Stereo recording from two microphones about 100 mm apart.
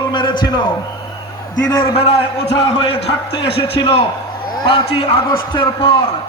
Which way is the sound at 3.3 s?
50° left (ahead or behind).